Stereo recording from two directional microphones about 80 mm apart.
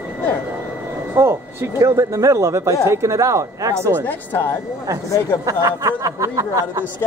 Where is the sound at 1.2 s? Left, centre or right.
Right.